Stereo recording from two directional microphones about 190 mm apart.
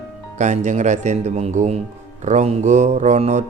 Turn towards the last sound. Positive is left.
turn(degrees=-35)  # may be behind; listen again after turning